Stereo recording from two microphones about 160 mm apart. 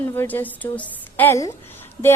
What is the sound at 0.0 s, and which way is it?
A woman's voice, 10° left (ahead or behind).